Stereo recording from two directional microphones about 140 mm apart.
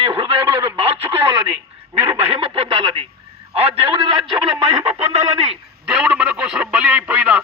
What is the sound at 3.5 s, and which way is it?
Speech, 45° right (ahead or behind).